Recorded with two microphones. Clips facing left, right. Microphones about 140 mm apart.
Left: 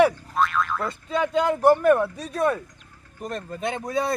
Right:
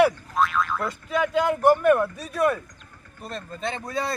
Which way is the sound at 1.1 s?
30° left (ahead or behind).